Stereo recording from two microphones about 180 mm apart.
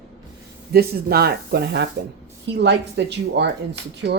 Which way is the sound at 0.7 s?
60° right (ahead or behind).